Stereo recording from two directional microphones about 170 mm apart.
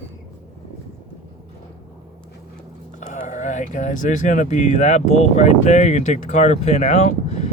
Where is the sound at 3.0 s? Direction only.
45° left (ahead or behind).